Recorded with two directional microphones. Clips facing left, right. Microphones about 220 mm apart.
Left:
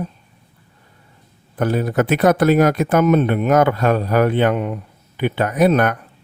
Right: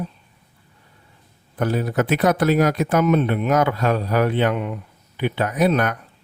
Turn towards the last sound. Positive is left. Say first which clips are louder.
# left 4 dB
turn(degrees=50)  # may be behind; listen again after turning